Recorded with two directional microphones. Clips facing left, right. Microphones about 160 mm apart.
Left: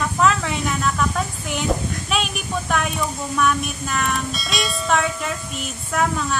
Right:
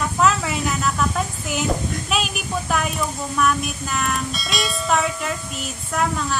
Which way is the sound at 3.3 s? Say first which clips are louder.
Even; centre (ahead or behind).